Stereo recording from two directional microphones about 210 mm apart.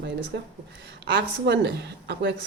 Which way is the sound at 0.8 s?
55° right (ahead or behind).